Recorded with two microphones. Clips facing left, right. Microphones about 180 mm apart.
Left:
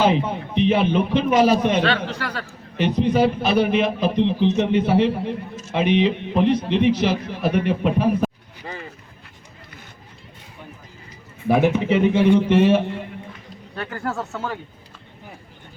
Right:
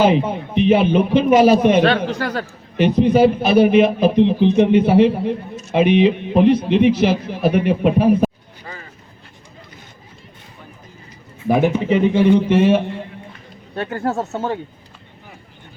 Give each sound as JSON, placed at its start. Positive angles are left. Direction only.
{"t": 0.5, "sound": "speech", "side_deg": -5}
{"t": 1.8, "sound": "speech", "side_deg": -50}
{"t": 2.7, "sound": "speech", "side_deg": -10}
{"t": 11.4, "sound": "speech", "side_deg": 0}
{"t": 13.7, "sound": "speech", "side_deg": -25}